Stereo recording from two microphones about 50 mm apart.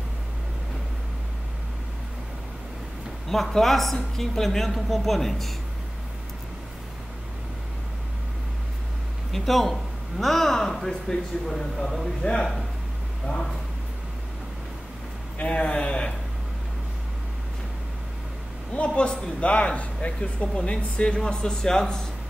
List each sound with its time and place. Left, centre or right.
3.3 s speech: centre
9.3 s speech: centre
12.2 s speech: centre
13.3 s speech: centre
15.3 s a man's voice: left
18.7 s a man's voice: left